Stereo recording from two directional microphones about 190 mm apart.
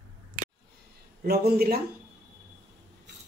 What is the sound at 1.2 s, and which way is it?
Speech, 55° right (ahead or behind).